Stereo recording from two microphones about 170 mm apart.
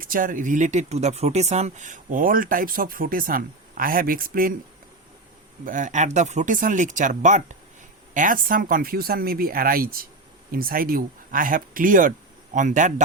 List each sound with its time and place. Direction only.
0.0 s speech: 55° right (ahead or behind)
5.6 s speech: 50° right (ahead or behind)